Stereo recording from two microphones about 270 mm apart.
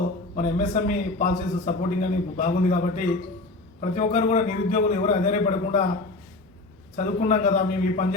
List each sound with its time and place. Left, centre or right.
0.3 s a man's voice: left
6.9 s a man's voice: left